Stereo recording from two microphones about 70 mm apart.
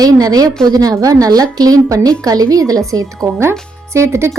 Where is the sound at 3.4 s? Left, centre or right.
Right.